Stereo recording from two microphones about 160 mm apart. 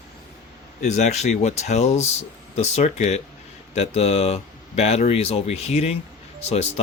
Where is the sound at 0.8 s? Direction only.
45° left (ahead or behind).